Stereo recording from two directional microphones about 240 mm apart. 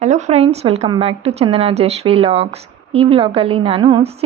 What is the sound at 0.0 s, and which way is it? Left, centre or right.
A woman's voice, right.